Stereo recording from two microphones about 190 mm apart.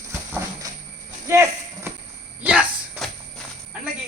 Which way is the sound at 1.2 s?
15° right (ahead or behind).